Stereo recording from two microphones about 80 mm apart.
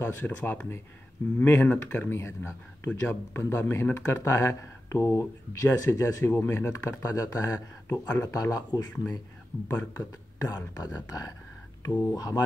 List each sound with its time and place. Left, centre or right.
0.0 s speech: left
6.3 s speech: left
9.7 s speech: left
11.0 s speech: left
11.9 s speech: left
12.2 s speech: left